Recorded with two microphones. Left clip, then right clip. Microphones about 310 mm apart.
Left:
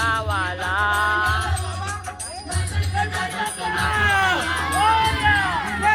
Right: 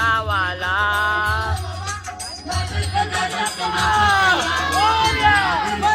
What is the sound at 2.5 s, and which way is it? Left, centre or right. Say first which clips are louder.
Music: right 4 dB; right.